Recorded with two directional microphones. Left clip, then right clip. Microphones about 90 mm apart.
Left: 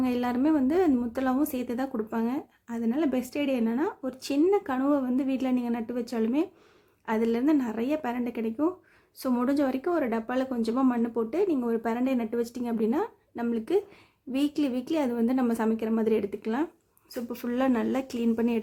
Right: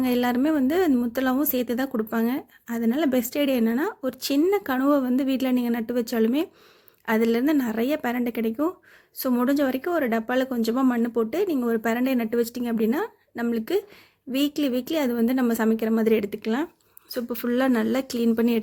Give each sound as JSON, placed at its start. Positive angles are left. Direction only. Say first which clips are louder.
{"t": 0.0, "sound": "a woman's voice", "louder": "right 4 dB", "side_deg": -30}
{"t": 9.1, "sound": "speech", "louder": "right 4 dB", "side_deg": -20}